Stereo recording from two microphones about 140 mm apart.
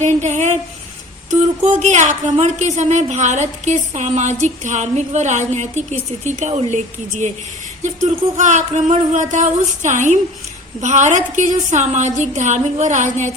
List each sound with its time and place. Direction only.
0.0 s speech: 55° right (ahead or behind)
8.0 s speech: 60° right (ahead or behind)